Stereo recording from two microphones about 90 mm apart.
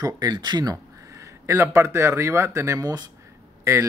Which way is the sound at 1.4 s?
30° right (ahead or behind).